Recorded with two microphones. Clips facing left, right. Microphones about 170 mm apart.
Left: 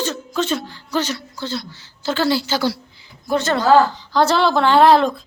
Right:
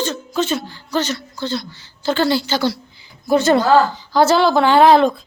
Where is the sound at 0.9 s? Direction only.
10° left (ahead or behind).